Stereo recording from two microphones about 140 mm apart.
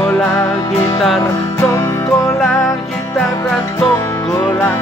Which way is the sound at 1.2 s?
20° left (ahead or behind).